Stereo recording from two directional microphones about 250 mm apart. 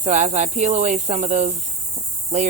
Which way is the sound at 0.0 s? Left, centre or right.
Right.